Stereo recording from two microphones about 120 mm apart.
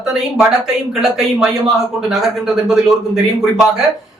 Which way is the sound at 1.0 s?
Centre (ahead or behind).